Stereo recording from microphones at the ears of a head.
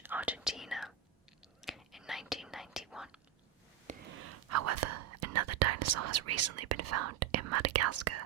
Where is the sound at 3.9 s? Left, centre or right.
Right.